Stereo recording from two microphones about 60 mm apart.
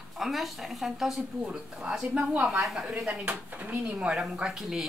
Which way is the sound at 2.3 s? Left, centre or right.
Right.